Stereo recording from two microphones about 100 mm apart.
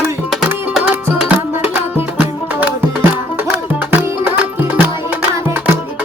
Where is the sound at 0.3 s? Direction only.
Centre (ahead or behind).